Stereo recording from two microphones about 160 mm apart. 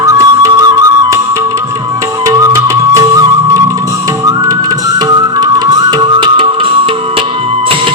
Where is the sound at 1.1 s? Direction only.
20° right (ahead or behind); by 7.9 s 35° right (ahead or behind).